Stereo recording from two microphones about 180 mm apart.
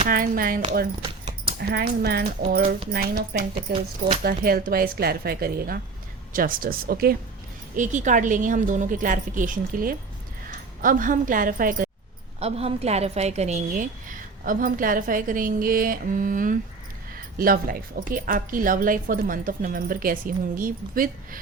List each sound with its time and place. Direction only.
0.0 s a woman's voice: 50° right (ahead or behind)
1.6 s speech: 60° right (ahead or behind)
2.5 s a woman's voice: 45° right (ahead or behind)
7.8 s a woman's voice: 45° right (ahead or behind)
12.4 s a woman's voice: 35° right (ahead or behind); by 21.1 s 50° right (ahead or behind)